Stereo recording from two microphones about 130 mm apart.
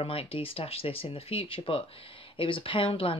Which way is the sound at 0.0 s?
45° left (ahead or behind).